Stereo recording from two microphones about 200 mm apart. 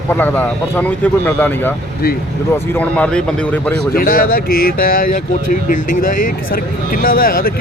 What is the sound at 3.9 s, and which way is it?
Speech, 45° left (ahead or behind).